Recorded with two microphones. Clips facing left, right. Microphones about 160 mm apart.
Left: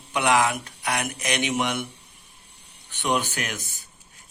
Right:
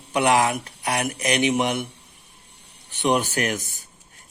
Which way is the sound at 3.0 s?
40° right (ahead or behind).